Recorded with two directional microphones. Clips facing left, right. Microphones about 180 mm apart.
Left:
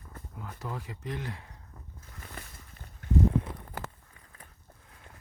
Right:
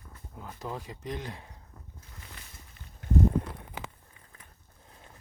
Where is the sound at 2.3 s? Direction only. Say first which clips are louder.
Left 5 dB; 50° left (ahead or behind).